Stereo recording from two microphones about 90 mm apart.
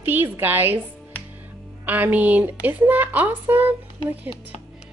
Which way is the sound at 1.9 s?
20° right (ahead or behind).